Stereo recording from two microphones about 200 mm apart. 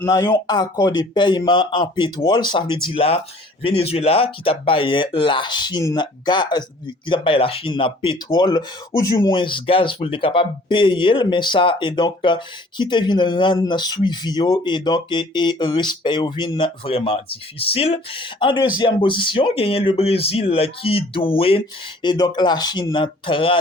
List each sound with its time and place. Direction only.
0.0 s speech: 15° left (ahead or behind)